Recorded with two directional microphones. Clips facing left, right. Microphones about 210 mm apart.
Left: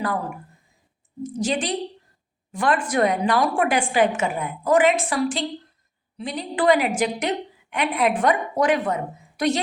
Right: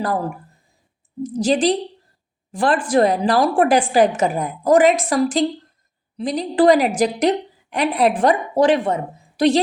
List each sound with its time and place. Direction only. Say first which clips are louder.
0.0 s a woman's voice: right 4 dB; 35° right (ahead or behind)